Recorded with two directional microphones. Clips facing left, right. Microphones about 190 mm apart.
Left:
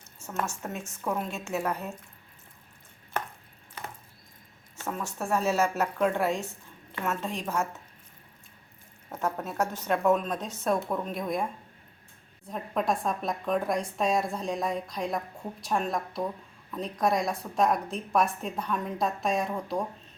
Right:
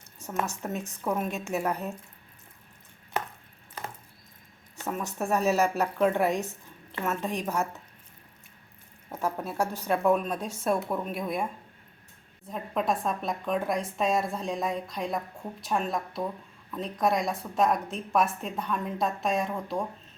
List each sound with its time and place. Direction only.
0.2 s a woman's voice: 15° right (ahead or behind)
4.8 s a woman's voice: 15° right (ahead or behind)
9.0 s a woman's voice: 10° right (ahead or behind)
12.5 s a woman's voice: centre (ahead or behind)